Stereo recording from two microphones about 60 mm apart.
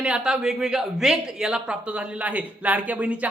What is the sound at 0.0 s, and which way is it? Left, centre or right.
Speech, centre.